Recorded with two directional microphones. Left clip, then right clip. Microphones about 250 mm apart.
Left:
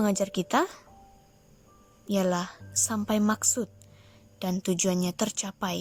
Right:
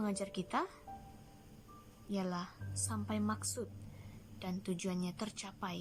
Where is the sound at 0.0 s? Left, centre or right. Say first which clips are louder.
Left 13 dB; left.